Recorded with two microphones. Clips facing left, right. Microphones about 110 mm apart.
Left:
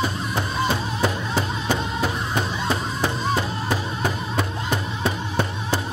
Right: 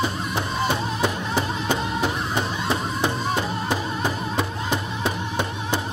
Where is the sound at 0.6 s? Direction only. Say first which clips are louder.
Even; 15° right (ahead or behind).